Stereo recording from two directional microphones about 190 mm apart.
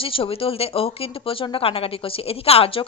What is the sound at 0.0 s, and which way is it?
Speech, 30° left (ahead or behind).